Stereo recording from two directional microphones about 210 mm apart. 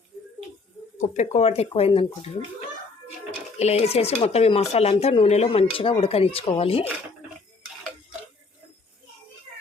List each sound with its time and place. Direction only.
1.1 s speech: 30° left (ahead or behind)
3.6 s speech: 30° left (ahead or behind)